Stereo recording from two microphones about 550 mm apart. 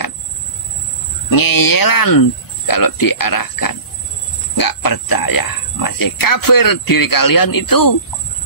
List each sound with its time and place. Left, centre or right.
1.3 s speech: left